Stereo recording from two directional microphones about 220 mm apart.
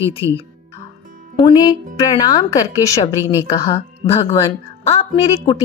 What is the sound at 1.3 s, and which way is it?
Speech, 20° left (ahead or behind).